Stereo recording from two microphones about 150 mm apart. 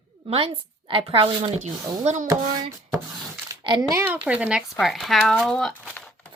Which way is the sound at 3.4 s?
30° right (ahead or behind).